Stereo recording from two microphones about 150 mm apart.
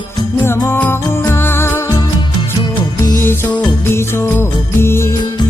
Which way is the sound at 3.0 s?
20° left (ahead or behind).